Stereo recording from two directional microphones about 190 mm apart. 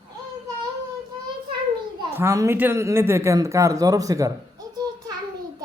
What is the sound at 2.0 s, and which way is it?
Speech, 15° right (ahead or behind).